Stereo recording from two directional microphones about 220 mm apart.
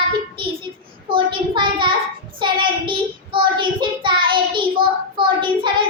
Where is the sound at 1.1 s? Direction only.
20° right (ahead or behind).